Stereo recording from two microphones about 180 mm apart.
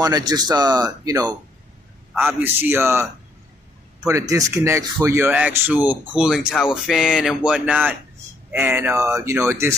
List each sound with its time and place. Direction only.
0.0 s speech: 20° right (ahead or behind)
2.4 s speech: 10° right (ahead or behind)
4.1 s speech: 15° right (ahead or behind)